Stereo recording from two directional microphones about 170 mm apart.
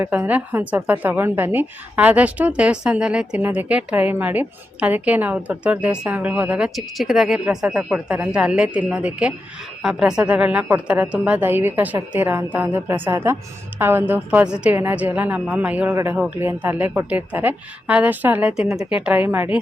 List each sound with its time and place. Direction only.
0.0 s a woman's voice: 10° right (ahead or behind)